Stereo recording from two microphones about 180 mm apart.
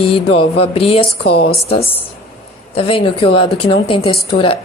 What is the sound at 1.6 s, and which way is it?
A woman's voice, 30° left (ahead or behind).